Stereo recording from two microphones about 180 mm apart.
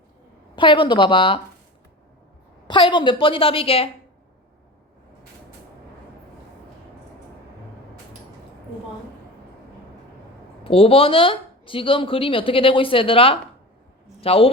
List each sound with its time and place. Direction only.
0.5 s speech: 25° left (ahead or behind)
2.6 s speech: 25° left (ahead or behind)
10.6 s a woman's voice: 30° left (ahead or behind)